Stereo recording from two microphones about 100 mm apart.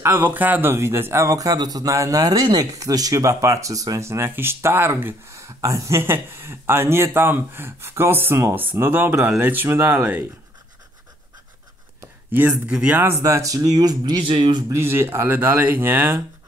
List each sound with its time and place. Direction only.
0.0 s speech: 25° right (ahead or behind)
12.3 s speech: 15° right (ahead or behind)
13.0 s speech: 30° right (ahead or behind); by 14.2 s 45° right (ahead or behind)
14.2 s speech: 60° right (ahead or behind)
14.7 s speech: 25° right (ahead or behind)